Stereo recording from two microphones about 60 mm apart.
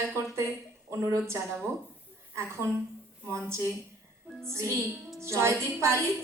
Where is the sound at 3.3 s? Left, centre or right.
Right.